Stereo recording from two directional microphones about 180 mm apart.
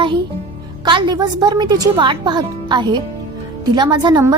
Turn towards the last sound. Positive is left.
turn(degrees=-25)  # may be behind; listen again after turning